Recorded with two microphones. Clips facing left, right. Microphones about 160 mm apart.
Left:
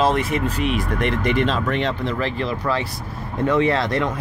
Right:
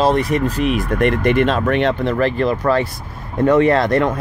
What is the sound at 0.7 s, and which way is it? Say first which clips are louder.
Speech: right 5 dB; 55° right (ahead or behind).